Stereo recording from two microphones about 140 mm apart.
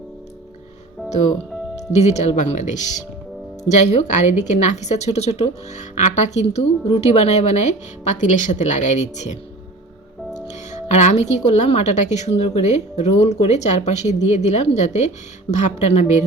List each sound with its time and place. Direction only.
1.9 s speech: 50° left (ahead or behind)
10.5 s speech: 55° left (ahead or behind)